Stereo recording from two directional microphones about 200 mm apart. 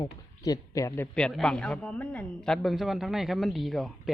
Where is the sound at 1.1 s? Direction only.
5° left (ahead or behind).